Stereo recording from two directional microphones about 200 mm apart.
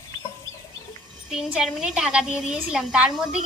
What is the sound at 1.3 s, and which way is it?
A woman's voice, 5° right (ahead or behind).